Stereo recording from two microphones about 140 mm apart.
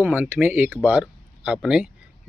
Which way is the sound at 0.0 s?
15° right (ahead or behind).